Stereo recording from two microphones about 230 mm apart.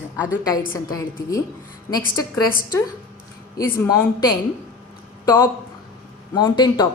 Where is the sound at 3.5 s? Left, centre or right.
Centre.